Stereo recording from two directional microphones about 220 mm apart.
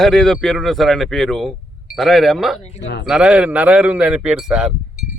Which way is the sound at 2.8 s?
55° left (ahead or behind).